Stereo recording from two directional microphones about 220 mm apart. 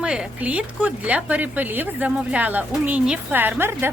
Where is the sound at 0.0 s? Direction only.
5° right (ahead or behind).